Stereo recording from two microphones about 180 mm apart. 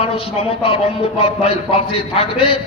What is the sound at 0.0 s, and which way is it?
A man's voice, 30° left (ahead or behind).